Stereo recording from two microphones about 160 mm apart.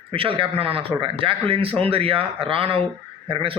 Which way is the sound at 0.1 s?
35° right (ahead or behind).